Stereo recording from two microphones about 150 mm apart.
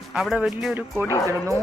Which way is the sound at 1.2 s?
20° right (ahead or behind).